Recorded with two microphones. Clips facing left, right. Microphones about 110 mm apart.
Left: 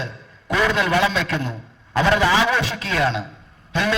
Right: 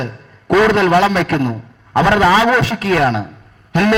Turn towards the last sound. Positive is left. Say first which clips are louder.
# right 8 dB
turn(degrees=-60)  # may be behind; listen again after turning